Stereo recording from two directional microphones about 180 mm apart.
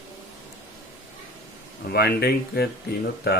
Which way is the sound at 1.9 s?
60° left (ahead or behind).